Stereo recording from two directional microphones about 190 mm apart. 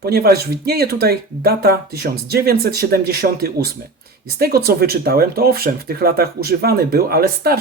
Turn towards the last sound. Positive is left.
turn(degrees=-50)  # may be behind; listen again after turning